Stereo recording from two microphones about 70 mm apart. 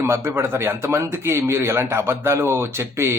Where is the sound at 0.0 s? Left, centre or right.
Right.